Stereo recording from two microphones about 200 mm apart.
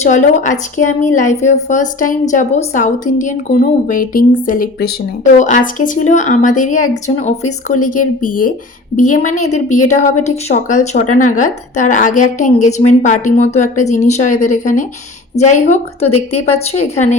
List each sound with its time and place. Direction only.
0.0 s a woman's voice: 35° left (ahead or behind)
7.9 s a woman's voice: 40° left (ahead or behind)